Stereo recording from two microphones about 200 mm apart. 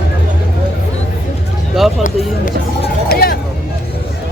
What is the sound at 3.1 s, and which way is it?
Hubbub, 50° left (ahead or behind).